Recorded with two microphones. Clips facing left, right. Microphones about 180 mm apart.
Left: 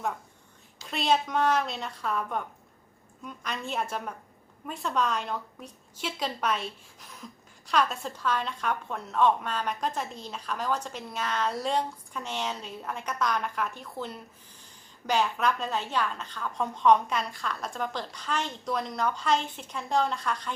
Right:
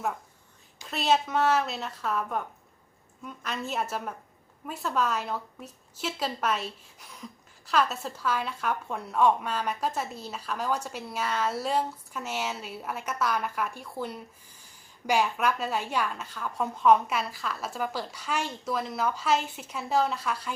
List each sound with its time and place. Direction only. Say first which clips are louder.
0.9 s a woman's voice: right 1 dB; 5° right (ahead or behind)
7.7 s a woman's voice: even; 5° right (ahead or behind)